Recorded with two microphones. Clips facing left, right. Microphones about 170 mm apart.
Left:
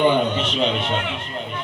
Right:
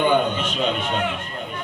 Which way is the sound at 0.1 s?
50° right (ahead or behind).